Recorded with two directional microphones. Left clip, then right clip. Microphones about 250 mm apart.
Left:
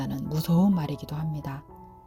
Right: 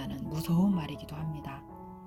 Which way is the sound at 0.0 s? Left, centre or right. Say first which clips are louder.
Left 5 dB; left.